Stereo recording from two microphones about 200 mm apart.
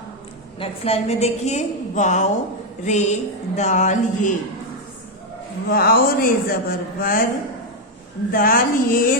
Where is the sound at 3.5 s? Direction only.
35° left (ahead or behind).